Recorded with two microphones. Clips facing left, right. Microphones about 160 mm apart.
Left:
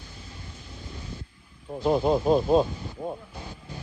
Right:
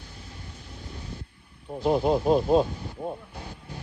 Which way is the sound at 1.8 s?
5° right (ahead or behind).